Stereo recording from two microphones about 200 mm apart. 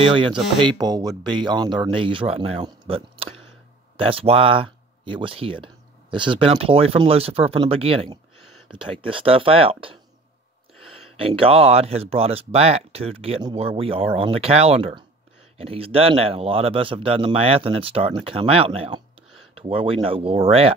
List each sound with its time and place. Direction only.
0.1 s speech: 25° right (ahead or behind)
11.1 s speech: 25° right (ahead or behind)